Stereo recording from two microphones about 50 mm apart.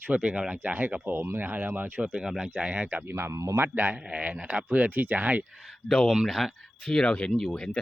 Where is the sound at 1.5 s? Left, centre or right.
Right.